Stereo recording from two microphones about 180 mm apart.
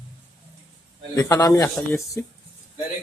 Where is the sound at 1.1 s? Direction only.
20° left (ahead or behind).